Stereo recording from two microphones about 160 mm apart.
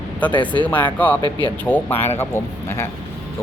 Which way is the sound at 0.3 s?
30° left (ahead or behind).